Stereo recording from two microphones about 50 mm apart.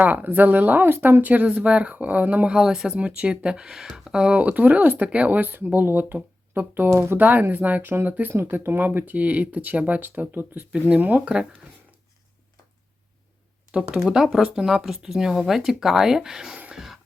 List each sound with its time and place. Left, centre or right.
0.0 s speech: right
1.2 s speech: right
2.5 s speech: centre; by 7.2 s right
7.2 s speech: right
7.8 s speech: right
8.0 s speech: right
8.3 s speech: right
10.7 s speech: right
13.9 s speech: centre
16.7 s music: centre